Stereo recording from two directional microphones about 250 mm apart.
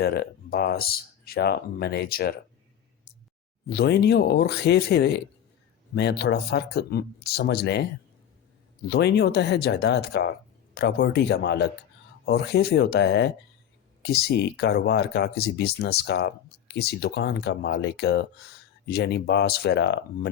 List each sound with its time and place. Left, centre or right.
0.0 s speech: left
3.7 s speech: left
8.9 s speech: left